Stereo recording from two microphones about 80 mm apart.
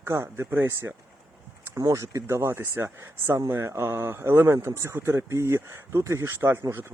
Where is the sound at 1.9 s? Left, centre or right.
Right.